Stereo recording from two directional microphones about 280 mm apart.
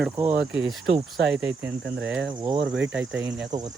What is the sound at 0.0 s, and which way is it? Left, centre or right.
Speech, centre.